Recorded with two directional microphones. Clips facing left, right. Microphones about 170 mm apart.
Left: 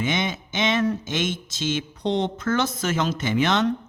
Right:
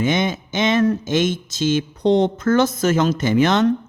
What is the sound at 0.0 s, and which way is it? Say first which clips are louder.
Speech: right 6 dB; 45° right (ahead or behind).